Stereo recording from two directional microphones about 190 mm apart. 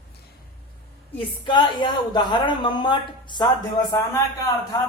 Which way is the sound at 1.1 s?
25° left (ahead or behind).